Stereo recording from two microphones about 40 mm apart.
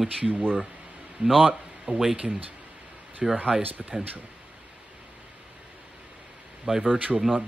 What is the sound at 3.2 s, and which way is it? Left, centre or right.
Speech, centre.